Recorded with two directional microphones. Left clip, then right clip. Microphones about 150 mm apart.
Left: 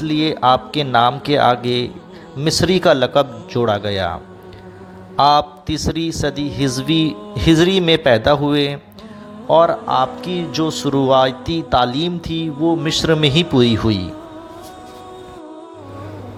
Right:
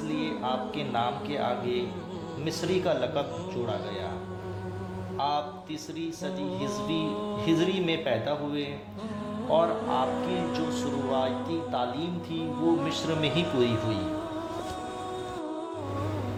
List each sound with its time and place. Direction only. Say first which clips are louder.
0.1 s a man's voice: left 17 dB; 60° left (ahead or behind)
5.1 s a man's voice: left 16 dB; 60° left (ahead or behind)
9.5 s speech: left 12 dB; 50° left (ahead or behind)
10.1 s music: left 5 dB; centre (ahead or behind)
10.5 s a man's voice: left 11 dB; 60° left (ahead or behind)